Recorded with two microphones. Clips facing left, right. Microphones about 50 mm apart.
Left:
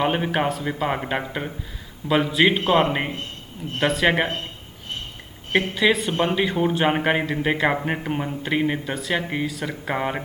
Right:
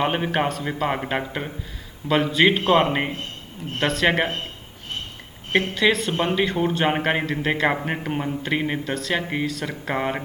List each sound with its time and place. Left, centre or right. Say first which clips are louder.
0.0 s a man's voice: even; centre
5.5 s a man's voice: even; centre